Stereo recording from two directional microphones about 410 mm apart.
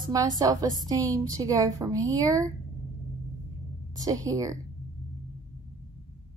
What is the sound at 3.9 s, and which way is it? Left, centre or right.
Speech, centre.